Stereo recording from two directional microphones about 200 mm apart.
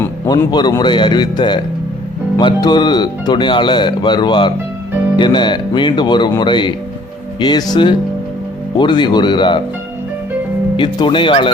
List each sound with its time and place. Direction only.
0.0 s speech: 15° left (ahead or behind)
10.8 s speech: 25° left (ahead or behind)